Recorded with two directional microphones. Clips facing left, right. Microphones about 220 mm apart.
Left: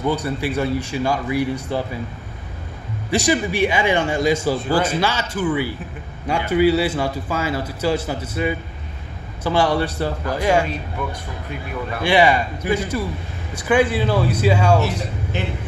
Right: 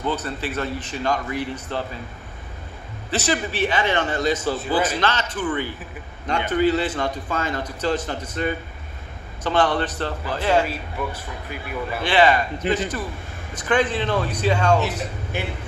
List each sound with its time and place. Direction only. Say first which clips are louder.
0.0 s a man's voice: left 4 dB; 10° left (ahead or behind)
3.1 s a man's voice: left 5 dB; 15° left (ahead or behind)
11.0 s speech: even; 5° right (ahead or behind)
12.0 s a man's voice: left 2 dB; 10° left (ahead or behind)
15.3 s a man's voice: left 2 dB; 10° right (ahead or behind)